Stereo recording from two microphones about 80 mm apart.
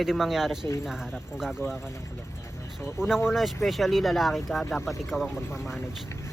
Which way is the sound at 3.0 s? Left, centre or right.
Centre.